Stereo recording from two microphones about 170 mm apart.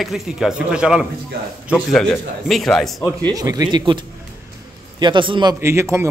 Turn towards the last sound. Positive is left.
turn(degrees=-15)  # may be behind; listen again after turning